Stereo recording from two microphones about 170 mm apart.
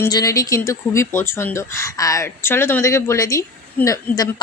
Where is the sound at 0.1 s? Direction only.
20° left (ahead or behind).